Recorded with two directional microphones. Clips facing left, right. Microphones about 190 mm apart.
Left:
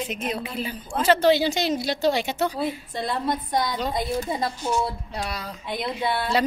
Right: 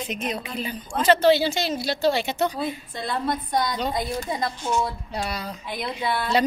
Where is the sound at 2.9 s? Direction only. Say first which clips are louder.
Left 1 dB; 25° left (ahead or behind).